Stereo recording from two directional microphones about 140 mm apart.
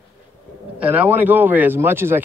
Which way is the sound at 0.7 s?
10° right (ahead or behind).